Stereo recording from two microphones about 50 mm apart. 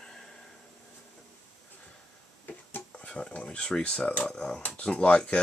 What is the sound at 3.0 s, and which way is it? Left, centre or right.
Speech, left.